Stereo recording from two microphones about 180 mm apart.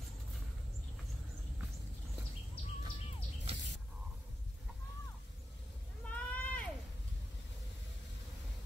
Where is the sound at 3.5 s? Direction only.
35° right (ahead or behind).